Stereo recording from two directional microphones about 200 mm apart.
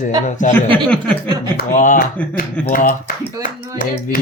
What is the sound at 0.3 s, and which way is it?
Speech, 35° left (ahead or behind).